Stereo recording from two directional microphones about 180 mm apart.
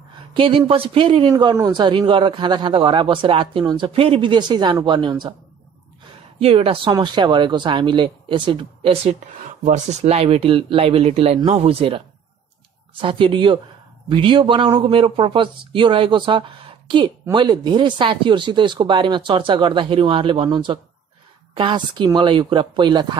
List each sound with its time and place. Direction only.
0.3 s speech: 30° right (ahead or behind)
6.4 s speech: 30° right (ahead or behind)
9.4 s speech: 40° right (ahead or behind)